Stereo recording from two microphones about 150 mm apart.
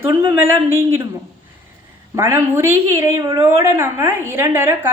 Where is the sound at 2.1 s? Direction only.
20° right (ahead or behind).